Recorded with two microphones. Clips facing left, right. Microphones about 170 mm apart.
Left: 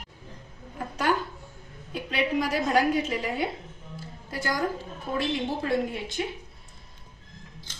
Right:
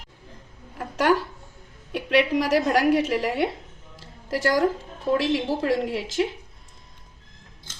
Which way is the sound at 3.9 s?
90° right.